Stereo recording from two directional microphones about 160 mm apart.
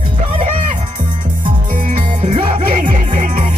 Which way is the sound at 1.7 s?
55° right (ahead or behind).